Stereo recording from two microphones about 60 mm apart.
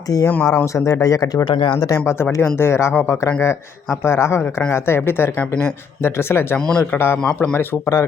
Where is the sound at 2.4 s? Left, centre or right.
Left.